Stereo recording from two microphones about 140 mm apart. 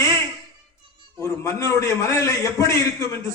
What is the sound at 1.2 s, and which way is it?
A man's voice, 20° left (ahead or behind).